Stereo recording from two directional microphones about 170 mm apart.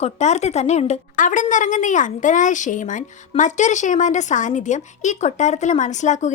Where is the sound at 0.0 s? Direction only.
40° left (ahead or behind).